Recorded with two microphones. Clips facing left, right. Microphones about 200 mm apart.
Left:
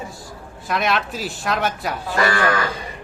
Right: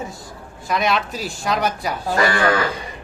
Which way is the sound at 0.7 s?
Centre (ahead or behind).